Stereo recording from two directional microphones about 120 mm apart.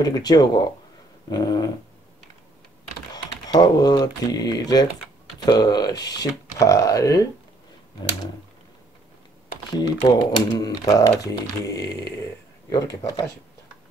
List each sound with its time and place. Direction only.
0.0 s speech: 35° left (ahead or behind)
3.4 s speech: 35° left (ahead or behind)
9.8 s speech: 35° left (ahead or behind)
11.6 s a sound: 30° left (ahead or behind)
12.6 s speech: 30° left (ahead or behind)